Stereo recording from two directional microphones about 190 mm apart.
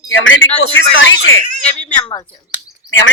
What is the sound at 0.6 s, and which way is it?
Speech, 65° left (ahead or behind).